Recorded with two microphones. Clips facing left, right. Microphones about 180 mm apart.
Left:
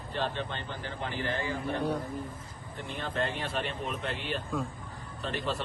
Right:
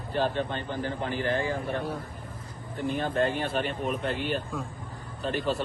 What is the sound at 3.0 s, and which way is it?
Speech, 50° right (ahead or behind).